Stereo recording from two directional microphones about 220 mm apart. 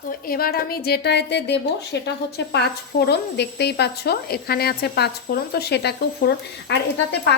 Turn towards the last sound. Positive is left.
turn(degrees=50)  # may be behind; listen again after turning